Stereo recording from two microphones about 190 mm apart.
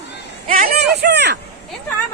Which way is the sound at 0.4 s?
45° right (ahead or behind).